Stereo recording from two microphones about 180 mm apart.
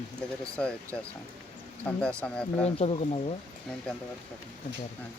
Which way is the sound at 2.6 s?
35° left (ahead or behind).